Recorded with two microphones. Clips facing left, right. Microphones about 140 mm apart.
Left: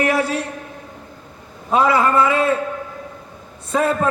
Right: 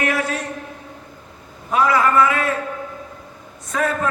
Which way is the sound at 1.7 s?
30° left (ahead or behind).